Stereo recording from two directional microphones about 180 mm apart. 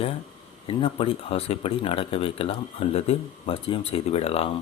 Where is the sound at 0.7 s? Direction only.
30° left (ahead or behind).